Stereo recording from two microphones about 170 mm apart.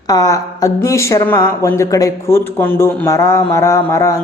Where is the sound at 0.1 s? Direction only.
20° left (ahead or behind).